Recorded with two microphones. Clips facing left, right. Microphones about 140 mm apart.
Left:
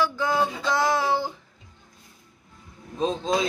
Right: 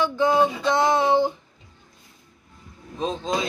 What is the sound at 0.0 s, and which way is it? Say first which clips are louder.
Speech: right 4 dB; 20° right (ahead or behind).